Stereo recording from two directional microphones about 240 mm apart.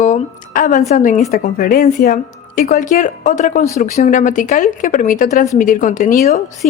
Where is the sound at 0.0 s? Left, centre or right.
Left.